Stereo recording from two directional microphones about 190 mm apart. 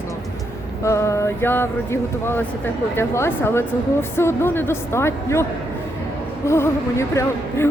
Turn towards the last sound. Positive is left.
turn(degrees=15)  # may be behind; listen again after turning